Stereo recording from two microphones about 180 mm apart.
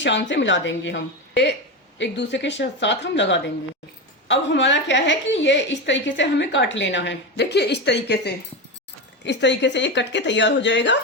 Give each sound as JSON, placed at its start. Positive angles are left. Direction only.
{"t": 0.0, "sound": "a woman's voice", "side_deg": 80}